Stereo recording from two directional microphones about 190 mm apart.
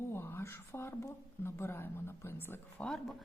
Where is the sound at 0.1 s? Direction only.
10° left (ahead or behind).